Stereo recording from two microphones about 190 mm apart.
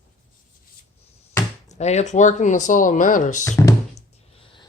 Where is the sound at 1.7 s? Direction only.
35° left (ahead or behind).